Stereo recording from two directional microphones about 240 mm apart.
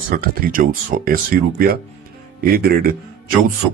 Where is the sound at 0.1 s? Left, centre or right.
Right.